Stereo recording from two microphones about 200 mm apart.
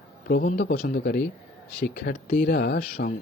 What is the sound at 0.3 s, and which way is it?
A man's voice, 40° left (ahead or behind).